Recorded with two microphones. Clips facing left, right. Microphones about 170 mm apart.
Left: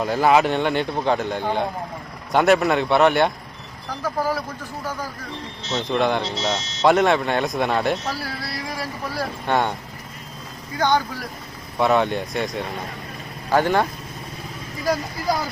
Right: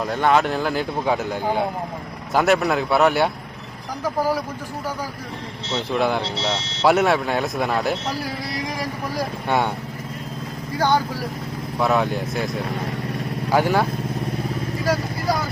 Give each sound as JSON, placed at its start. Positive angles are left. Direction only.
{"t": 0.0, "sound": "speech", "side_deg": 0}
{"t": 5.7, "sound": "speech", "side_deg": -5}
{"t": 6.6, "sound": "speech", "side_deg": -30}
{"t": 6.8, "sound": "speech", "side_deg": -5}
{"t": 8.4, "sound": "speech", "side_deg": -15}
{"t": 10.8, "sound": "speech", "side_deg": -10}